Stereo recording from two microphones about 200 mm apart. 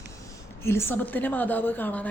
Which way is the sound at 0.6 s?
10° left (ahead or behind).